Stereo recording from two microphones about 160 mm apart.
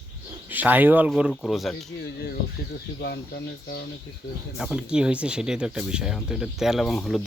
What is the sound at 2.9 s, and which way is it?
Speech, 90° left.